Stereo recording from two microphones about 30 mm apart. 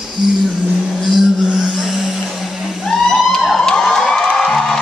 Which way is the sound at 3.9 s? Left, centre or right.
Centre.